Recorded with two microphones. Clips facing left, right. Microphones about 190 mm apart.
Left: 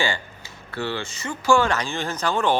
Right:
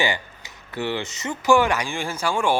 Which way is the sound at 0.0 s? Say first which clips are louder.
Right 1 dB; 15° right (ahead or behind).